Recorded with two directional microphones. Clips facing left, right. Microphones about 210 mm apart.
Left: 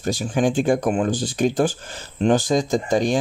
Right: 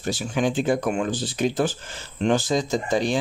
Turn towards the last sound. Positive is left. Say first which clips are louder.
# left 3 dB
turn(degrees=45)  # may be behind; listen again after turning